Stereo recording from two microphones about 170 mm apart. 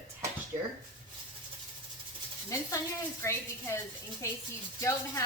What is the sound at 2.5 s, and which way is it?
Speech, 15° left (ahead or behind).